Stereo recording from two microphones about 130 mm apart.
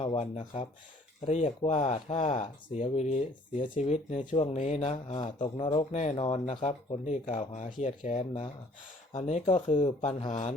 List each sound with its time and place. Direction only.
0.0 s speech: 50° left (ahead or behind)
1.3 s speech: 60° left (ahead or behind)
6.1 s speech: 50° left (ahead or behind); by 8.3 s 70° left (ahead or behind)
9.1 s speech: 55° left (ahead or behind)
10.0 s speech: 60° left (ahead or behind)